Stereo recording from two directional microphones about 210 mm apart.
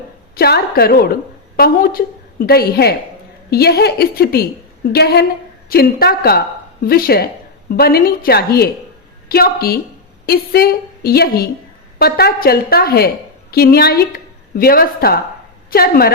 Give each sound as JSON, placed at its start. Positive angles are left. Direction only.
{"t": 0.3, "sound": "a woman's voice", "side_deg": 50}